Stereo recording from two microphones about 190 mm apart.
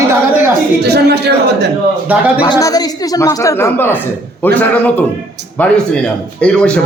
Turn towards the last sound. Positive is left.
turn(degrees=5)  # may be behind; listen again after turning